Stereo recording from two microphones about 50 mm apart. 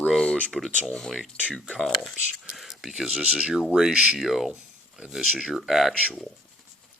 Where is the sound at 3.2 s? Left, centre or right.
Centre.